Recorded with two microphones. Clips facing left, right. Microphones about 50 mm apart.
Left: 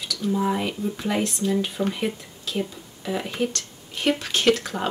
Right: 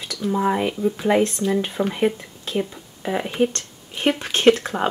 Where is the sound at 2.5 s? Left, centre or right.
Right.